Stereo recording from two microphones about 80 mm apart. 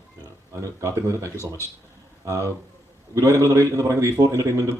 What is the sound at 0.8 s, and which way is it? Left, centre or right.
A man's voice, right.